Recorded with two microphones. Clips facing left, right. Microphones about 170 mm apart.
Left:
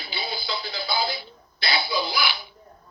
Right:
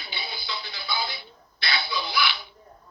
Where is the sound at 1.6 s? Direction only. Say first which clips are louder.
Left 4 dB; 35° left (ahead or behind).